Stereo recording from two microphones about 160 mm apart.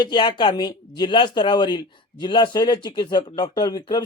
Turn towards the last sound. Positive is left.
turn(degrees=25)  # may be behind; listen again after turning